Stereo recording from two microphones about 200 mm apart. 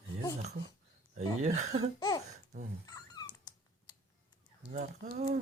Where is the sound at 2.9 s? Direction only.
20° left (ahead or behind).